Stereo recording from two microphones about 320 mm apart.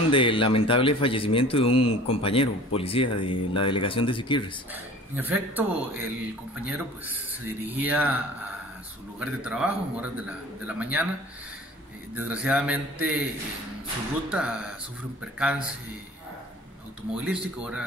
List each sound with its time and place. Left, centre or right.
0.1 s speech: centre
5.1 s a man's voice: centre
9.2 s a man's voice: centre
12.2 s a man's voice: centre
14.3 s a man's voice: centre
17.1 s a man's voice: centre